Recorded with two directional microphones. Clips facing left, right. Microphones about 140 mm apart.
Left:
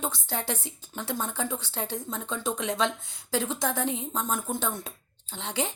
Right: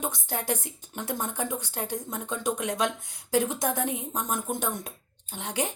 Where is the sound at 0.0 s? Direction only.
15° right (ahead or behind).